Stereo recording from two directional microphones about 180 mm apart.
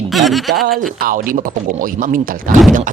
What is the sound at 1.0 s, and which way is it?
Speech, 50° right (ahead or behind).